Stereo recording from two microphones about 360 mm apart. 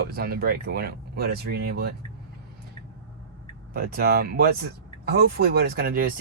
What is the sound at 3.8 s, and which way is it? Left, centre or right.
Speech, right.